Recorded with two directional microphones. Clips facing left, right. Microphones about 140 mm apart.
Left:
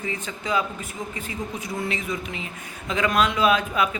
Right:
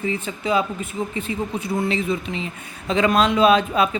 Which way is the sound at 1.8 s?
30° right (ahead or behind).